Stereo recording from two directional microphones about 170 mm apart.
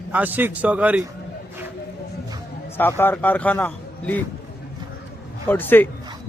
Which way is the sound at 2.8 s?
15° left (ahead or behind).